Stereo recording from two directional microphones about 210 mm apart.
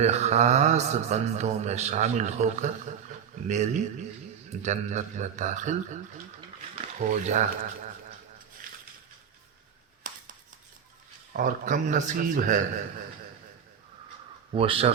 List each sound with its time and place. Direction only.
0.0 s speech: 30° right (ahead or behind)
7.1 s speech: 35° right (ahead or behind)
8.6 s a sound: 40° right (ahead or behind)
10.0 s a sound: 40° right (ahead or behind)
11.3 s speech: 40° right (ahead or behind)
14.5 s speech: 25° right (ahead or behind)